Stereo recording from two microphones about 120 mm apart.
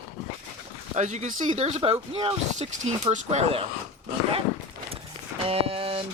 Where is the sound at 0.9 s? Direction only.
85° right; by 3.6 s 60° right (ahead or behind).